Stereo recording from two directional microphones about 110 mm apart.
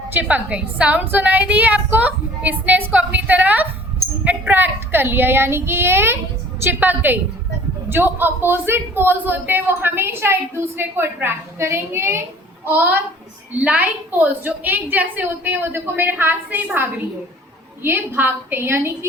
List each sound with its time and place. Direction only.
0.1 s a woman's voice: 15° right (ahead or behind)